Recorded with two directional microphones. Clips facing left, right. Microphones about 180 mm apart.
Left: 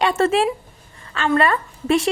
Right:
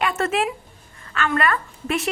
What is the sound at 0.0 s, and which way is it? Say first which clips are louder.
A woman's voice: left 5 dB; 30° left (ahead or behind).